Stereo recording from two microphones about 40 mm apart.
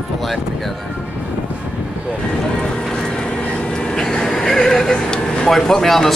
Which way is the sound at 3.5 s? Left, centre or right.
Centre.